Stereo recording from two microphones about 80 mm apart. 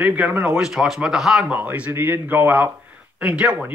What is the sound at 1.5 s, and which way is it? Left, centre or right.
Speech, right.